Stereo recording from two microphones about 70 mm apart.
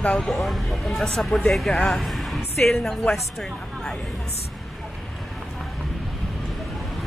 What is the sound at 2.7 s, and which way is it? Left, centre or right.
Speech, centre.